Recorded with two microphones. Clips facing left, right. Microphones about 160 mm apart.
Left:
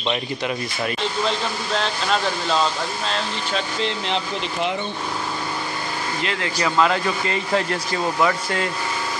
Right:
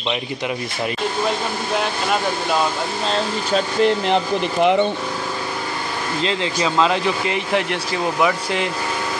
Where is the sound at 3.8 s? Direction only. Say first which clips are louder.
Right 8 dB; 55° right (ahead or behind).